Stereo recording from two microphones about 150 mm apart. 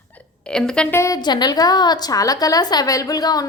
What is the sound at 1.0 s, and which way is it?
A woman's voice, 25° left (ahead or behind).